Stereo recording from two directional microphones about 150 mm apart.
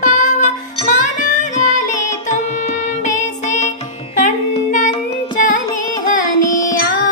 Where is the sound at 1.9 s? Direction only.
50° left (ahead or behind).